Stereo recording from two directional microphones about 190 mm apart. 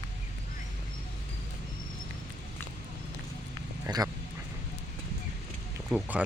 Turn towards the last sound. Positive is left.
turn(degrees=-5)  # may be behind; listen again after turning